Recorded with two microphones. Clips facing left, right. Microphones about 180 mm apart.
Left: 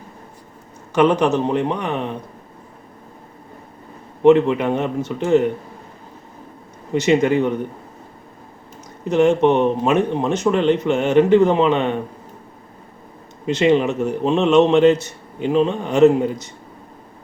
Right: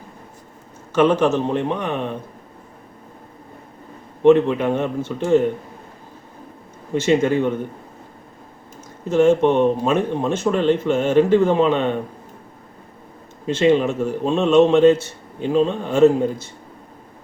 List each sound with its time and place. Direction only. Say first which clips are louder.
0.9 s a man's voice: even; 15° left (ahead or behind)
4.2 s a man's voice: left 1 dB; 15° left (ahead or behind)
6.9 s a man's voice: left 1 dB; 15° left (ahead or behind)
9.0 s a man's voice: even; 15° left (ahead or behind)
13.4 s a man's voice: even; 15° left (ahead or behind)